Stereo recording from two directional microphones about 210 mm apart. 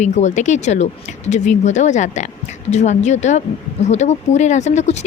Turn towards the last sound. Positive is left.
turn(degrees=30)  # may be behind; listen again after turning